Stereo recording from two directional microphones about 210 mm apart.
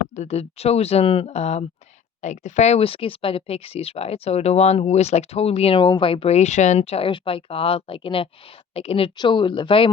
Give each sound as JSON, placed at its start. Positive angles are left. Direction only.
{"t": 0.2, "sound": "speech", "side_deg": 30}